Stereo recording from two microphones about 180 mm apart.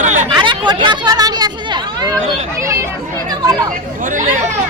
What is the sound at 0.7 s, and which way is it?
Speech, 25° right (ahead or behind).